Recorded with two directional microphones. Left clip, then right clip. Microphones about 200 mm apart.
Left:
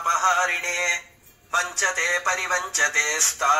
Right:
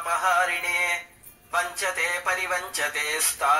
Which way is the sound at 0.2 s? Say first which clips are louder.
Left 2 dB; 20° left (ahead or behind).